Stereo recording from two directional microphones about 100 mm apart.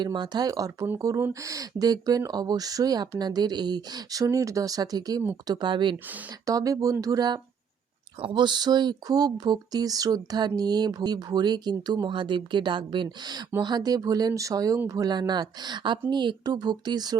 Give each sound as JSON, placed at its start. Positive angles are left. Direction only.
{"t": 0.0, "sound": "speech", "side_deg": -50}
{"t": 5.5, "sound": "speech", "side_deg": -50}
{"t": 6.4, "sound": "speech", "side_deg": -35}
{"t": 8.2, "sound": "speech", "side_deg": -55}